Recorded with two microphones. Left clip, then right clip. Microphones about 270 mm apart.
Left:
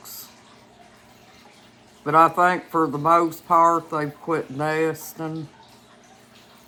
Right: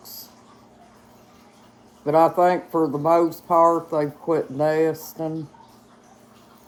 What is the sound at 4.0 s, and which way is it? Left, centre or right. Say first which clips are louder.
Speech: right 3 dB; left.